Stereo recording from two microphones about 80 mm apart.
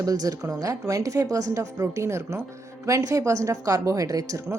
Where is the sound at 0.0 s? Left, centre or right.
Right.